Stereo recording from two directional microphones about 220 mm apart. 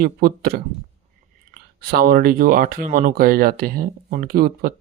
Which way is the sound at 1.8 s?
45° right (ahead or behind).